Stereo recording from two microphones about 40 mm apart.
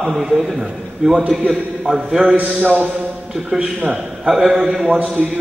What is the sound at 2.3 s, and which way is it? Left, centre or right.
Speech, right.